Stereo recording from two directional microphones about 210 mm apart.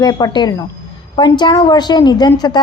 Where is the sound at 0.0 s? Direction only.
20° left (ahead or behind).